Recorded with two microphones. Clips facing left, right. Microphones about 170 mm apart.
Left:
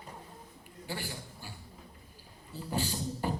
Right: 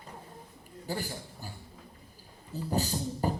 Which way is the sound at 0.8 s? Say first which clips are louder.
Right 4 dB; 40° right (ahead or behind).